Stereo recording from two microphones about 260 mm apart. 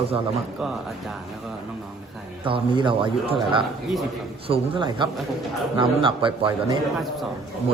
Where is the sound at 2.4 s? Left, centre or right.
Centre.